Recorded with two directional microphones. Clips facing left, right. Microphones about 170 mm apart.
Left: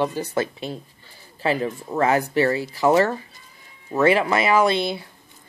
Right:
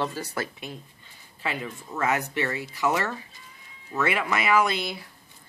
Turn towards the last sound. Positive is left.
turn(degrees=25)  # may be behind; listen again after turning